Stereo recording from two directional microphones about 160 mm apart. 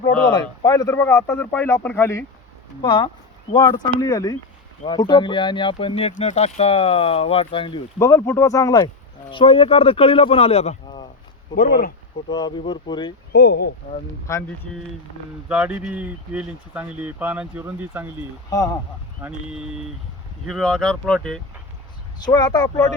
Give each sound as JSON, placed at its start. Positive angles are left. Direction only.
{"t": 0.3, "sound": "speech", "side_deg": 25}
{"t": 2.8, "sound": "speech", "side_deg": 30}
{"t": 7.9, "sound": "speech", "side_deg": 20}
{"t": 9.3, "sound": "speech", "side_deg": 35}
{"t": 11.5, "sound": "speech", "side_deg": 65}
{"t": 12.3, "sound": "speech", "side_deg": 25}
{"t": 13.3, "sound": "speech", "side_deg": 85}
{"t": 14.3, "sound": "speech", "side_deg": 20}
{"t": 15.4, "sound": "speech", "side_deg": -5}
{"t": 19.2, "sound": "speech", "side_deg": -10}
{"t": 20.5, "sound": "speech", "side_deg": 5}
{"t": 22.2, "sound": "speech", "side_deg": 25}